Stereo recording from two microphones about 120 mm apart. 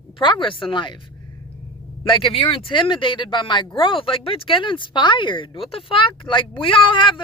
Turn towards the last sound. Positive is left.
turn(degrees=40)  # may be behind; listen again after turning